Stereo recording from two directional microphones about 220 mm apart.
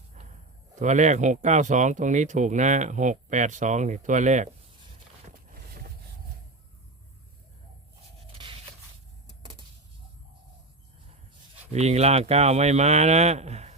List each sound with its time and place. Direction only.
0.2 s a sound: 30° right (ahead or behind)
0.8 s speech: 35° right (ahead or behind)
5.5 s vehicle: 40° right (ahead or behind)
9.4 s vehicle: 25° right (ahead or behind)
11.7 s speech: 30° right (ahead or behind)